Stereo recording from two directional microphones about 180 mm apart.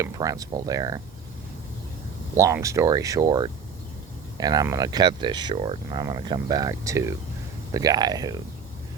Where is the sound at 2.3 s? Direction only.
15° right (ahead or behind).